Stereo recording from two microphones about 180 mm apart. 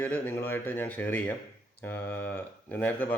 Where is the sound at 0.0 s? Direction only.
10° left (ahead or behind).